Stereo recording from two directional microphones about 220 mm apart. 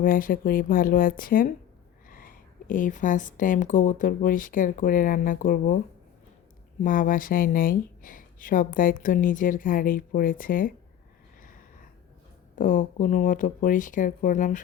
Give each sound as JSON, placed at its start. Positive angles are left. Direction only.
{"t": 0.0, "sound": "speech", "side_deg": 40}
{"t": 6.8, "sound": "speech", "side_deg": 40}
{"t": 12.5, "sound": "speech", "side_deg": 35}